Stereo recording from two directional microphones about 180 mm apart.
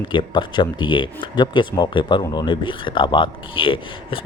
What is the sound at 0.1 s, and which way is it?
Speech, 25° left (ahead or behind).